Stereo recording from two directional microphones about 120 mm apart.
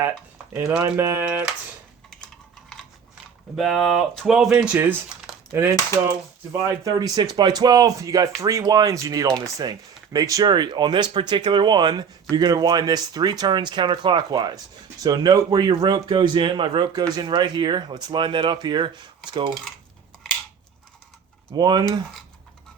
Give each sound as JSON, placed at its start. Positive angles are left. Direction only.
{"t": 0.9, "sound": "typewriter", "side_deg": -20}
{"t": 2.0, "sound": "a sound", "side_deg": 5}
{"t": 3.5, "sound": "speech", "side_deg": 0}
{"t": 4.6, "sound": "typewriter", "side_deg": -15}
{"t": 5.5, "sound": "a sound", "side_deg": -20}
{"t": 6.5, "sound": "speech", "side_deg": -25}
{"t": 21.5, "sound": "speech", "side_deg": -35}